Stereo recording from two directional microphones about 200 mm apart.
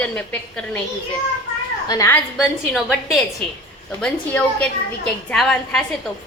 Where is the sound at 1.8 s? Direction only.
15° left (ahead or behind).